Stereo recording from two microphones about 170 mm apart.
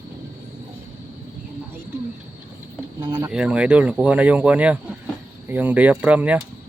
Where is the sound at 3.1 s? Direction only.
10° right (ahead or behind).